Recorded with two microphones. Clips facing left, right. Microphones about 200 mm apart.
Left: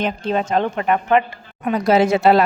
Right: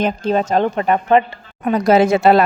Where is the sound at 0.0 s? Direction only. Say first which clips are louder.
Right 3 dB; 45° right (ahead or behind).